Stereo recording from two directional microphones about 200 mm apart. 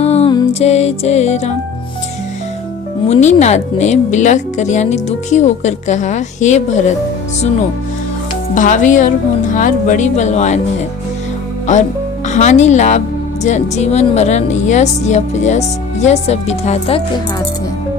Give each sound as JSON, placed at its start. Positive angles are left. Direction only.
{"t": 0.0, "sound": "music", "side_deg": 30}
{"t": 0.6, "sound": "a woman's voice", "side_deg": 30}
{"t": 3.1, "sound": "a woman's voice", "side_deg": 35}
{"t": 8.5, "sound": "a woman's voice", "side_deg": 40}
{"t": 12.3, "sound": "a woman's voice", "side_deg": 35}